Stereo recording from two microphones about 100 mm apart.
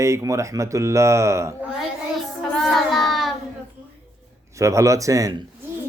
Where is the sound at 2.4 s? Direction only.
5° left (ahead or behind).